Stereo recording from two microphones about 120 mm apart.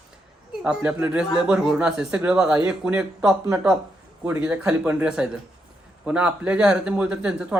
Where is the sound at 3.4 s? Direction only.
25° right (ahead or behind).